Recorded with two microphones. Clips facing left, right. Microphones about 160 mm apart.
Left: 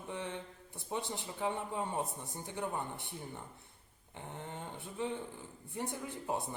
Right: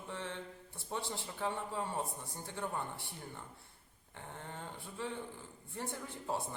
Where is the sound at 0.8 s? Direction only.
15° left (ahead or behind).